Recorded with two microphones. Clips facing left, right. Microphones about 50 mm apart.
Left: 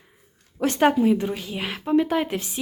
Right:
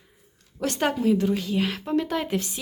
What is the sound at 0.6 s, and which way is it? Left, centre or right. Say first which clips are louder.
A woman's voice: left 5 dB; left.